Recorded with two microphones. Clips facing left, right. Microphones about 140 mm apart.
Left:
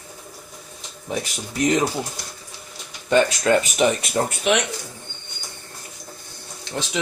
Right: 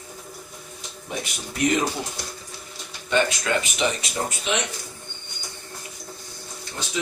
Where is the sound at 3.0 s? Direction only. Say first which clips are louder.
Left 5 dB; 40° left (ahead or behind); by 4.6 s 60° left (ahead or behind).